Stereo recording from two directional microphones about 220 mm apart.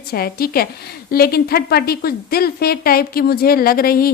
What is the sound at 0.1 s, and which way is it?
A woman's voice, 45° left (ahead or behind).